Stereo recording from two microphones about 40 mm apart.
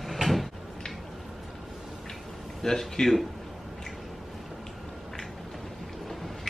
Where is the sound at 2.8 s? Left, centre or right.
Centre.